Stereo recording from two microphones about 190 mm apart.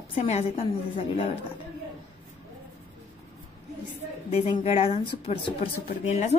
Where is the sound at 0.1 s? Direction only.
35° left (ahead or behind).